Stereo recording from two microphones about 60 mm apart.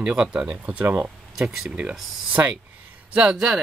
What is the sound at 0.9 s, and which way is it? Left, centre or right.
Speech, right.